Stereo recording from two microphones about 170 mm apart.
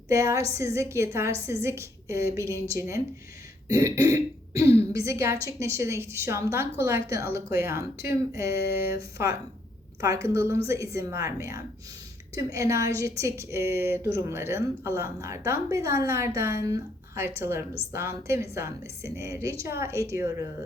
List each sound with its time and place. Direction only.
0.1 s a woman's voice: 20° right (ahead or behind)